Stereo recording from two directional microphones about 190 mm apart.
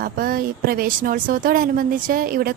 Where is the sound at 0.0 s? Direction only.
50° right (ahead or behind).